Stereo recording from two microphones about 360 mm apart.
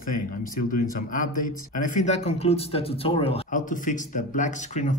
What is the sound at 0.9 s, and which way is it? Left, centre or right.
Speech, left.